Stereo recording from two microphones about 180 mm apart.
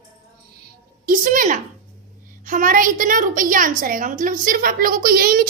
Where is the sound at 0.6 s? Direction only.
50° right (ahead or behind).